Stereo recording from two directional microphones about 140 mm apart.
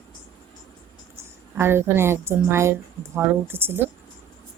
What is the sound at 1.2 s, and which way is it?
A woman's voice, 15° right (ahead or behind).